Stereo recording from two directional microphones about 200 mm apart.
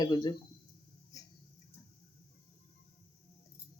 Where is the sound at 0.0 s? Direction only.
20° left (ahead or behind).